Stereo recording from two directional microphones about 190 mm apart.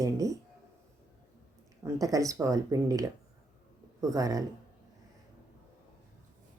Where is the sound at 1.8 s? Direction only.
15° right (ahead or behind).